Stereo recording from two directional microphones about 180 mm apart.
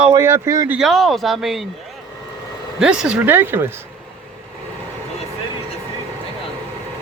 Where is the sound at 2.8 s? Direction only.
5° right (ahead or behind).